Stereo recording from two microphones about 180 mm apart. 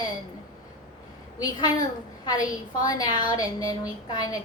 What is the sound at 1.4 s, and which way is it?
A woman's voice, 20° left (ahead or behind).